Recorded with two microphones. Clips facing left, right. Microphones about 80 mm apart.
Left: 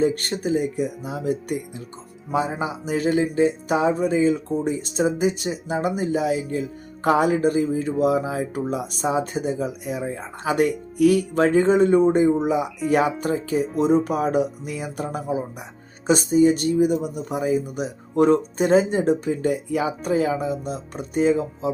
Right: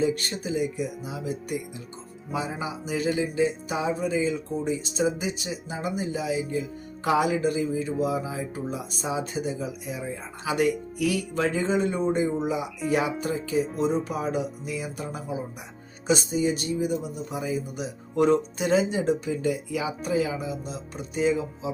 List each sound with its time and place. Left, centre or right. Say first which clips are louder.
0.0 s music: left 4 dB; left